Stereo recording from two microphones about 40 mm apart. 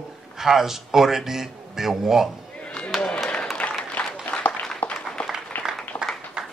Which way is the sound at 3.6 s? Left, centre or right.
Left.